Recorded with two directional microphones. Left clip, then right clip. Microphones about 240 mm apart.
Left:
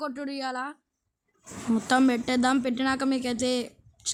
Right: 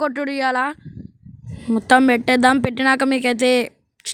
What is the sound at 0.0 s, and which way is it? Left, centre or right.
Speech, right.